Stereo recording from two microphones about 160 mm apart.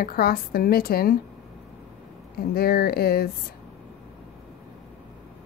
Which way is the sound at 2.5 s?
70° left (ahead or behind).